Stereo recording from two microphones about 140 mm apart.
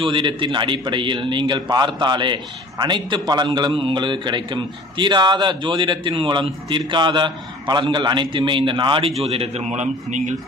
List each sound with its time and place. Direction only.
0.0 s a man's voice: 35° right (ahead or behind); by 10.3 s 60° right (ahead or behind)